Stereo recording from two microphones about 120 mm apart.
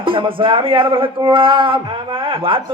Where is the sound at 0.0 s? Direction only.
45° right (ahead or behind).